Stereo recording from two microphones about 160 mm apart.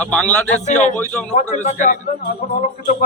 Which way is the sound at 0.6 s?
45° left (ahead or behind).